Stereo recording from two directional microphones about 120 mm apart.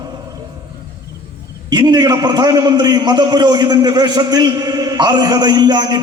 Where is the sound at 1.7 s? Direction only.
35° right (ahead or behind).